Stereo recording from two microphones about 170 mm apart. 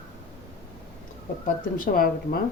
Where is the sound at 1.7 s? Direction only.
55° left (ahead or behind).